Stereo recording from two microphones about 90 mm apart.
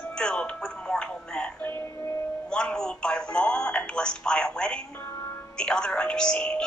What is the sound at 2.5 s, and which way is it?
A woman's voice, 10° left (ahead or behind).